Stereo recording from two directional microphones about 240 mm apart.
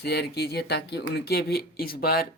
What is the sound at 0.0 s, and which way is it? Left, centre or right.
Speech, left.